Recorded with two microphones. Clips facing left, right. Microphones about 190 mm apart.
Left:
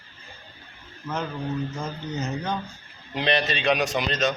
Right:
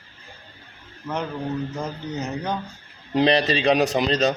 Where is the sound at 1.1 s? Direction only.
Centre (ahead or behind).